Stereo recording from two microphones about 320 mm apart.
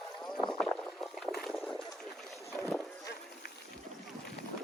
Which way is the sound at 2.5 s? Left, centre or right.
Centre.